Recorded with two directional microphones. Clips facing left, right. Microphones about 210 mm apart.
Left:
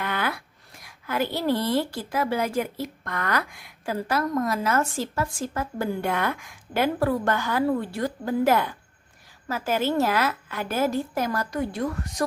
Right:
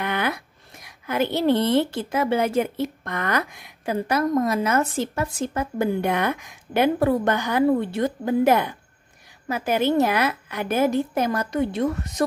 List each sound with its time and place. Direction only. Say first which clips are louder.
0.0 s a woman's voice: right 3 dB; 20° right (ahead or behind)